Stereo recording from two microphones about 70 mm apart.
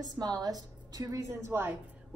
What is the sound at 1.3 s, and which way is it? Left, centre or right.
Speech, right.